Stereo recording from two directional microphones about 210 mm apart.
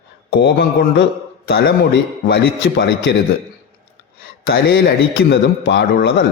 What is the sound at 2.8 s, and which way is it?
Speech, 55° left (ahead or behind).